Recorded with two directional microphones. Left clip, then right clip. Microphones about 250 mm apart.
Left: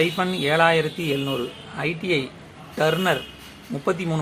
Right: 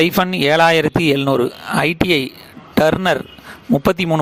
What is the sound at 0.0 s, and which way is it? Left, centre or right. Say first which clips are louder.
Speech: right 7 dB; right.